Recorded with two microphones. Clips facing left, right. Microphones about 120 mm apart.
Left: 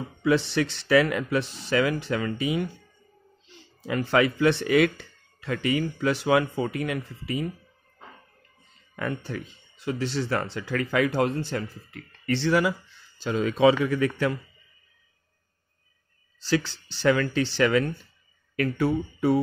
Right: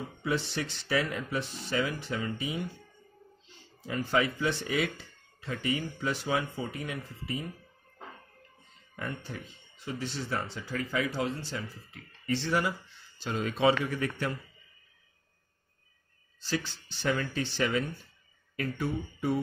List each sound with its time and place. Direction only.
0.2 s speech: 90° left
3.8 s speech: 80° left
8.9 s speech: 90° left
13.8 s speech: 90° left
16.4 s speech: 90° left